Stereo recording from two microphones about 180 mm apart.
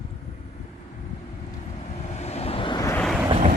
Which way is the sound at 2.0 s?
40° left (ahead or behind).